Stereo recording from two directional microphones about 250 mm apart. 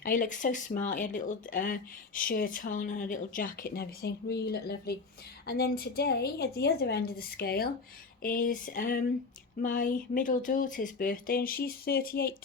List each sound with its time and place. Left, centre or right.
0.0 s speech: left